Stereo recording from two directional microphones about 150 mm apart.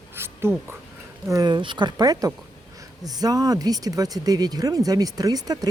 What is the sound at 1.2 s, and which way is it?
Speech, 25° right (ahead or behind).